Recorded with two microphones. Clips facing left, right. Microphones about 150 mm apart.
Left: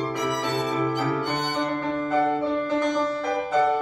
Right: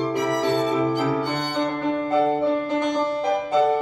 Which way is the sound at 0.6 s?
25° right (ahead or behind).